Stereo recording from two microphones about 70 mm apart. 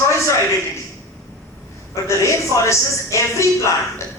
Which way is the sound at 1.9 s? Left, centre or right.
Left.